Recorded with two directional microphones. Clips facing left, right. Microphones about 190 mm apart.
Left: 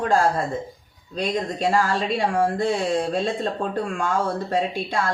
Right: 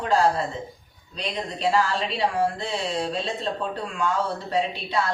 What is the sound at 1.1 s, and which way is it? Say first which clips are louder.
Speech: left 6 dB; 45° left (ahead or behind).